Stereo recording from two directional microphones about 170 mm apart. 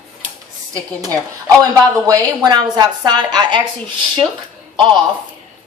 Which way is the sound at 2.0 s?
20° right (ahead or behind).